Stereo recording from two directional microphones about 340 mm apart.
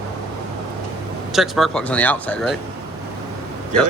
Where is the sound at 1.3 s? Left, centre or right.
Centre.